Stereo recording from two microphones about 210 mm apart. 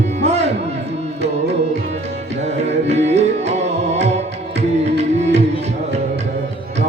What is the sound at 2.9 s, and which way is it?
Tabla, 30° right (ahead or behind).